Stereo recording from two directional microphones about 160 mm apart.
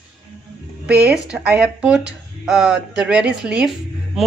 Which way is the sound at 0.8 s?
10° right (ahead or behind).